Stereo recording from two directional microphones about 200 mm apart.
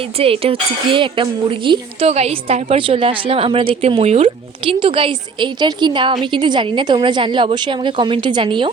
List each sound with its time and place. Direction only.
0.2 s speech: 30° right (ahead or behind)